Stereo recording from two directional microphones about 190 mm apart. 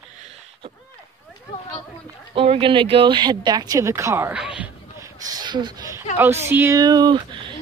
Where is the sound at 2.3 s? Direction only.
30° right (ahead or behind); by 4.7 s 5° right (ahead or behind).